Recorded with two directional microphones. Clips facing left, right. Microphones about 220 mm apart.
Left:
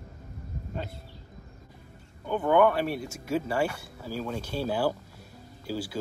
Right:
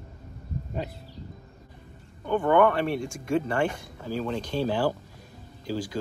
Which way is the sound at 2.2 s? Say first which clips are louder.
Right 1 dB; 5° left (ahead or behind).